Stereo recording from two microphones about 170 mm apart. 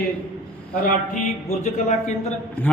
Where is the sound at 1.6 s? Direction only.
45° left (ahead or behind).